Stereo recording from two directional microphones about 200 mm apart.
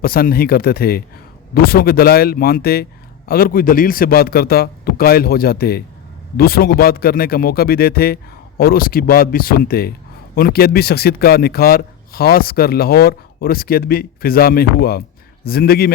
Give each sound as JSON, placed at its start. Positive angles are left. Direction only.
{"t": 0.0, "sound": "speech", "side_deg": 45}